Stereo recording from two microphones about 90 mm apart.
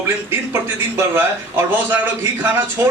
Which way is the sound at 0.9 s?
25° right (ahead or behind).